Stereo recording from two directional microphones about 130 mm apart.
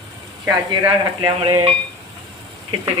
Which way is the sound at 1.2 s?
45° right (ahead or behind).